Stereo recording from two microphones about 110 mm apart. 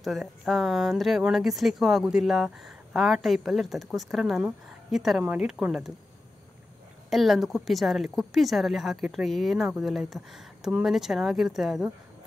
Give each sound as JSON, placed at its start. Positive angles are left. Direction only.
{"t": 0.0, "sound": "speech", "side_deg": 0}
{"t": 5.2, "sound": "speech", "side_deg": -15}
{"t": 7.1, "sound": "speech", "side_deg": 0}